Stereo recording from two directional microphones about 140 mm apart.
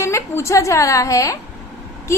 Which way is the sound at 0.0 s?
20° left (ahead or behind).